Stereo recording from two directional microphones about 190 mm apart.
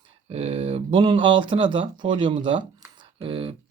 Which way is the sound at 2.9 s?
25° right (ahead or behind).